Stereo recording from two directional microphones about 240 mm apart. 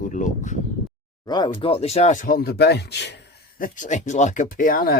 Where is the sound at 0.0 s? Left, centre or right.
Left.